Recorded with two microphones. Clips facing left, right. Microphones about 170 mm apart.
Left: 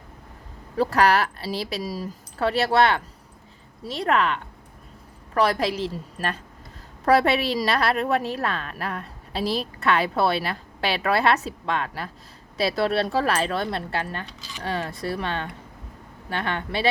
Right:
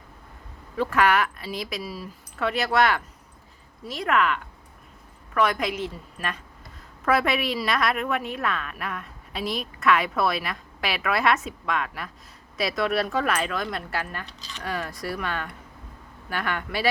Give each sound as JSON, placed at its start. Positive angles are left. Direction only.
{"t": 0.8, "sound": "a woman's voice", "side_deg": 35}